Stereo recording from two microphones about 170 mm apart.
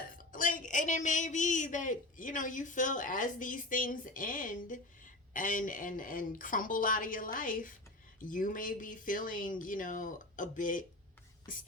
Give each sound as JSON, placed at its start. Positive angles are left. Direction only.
{"t": 0.1, "sound": "a woman's voice", "side_deg": 55}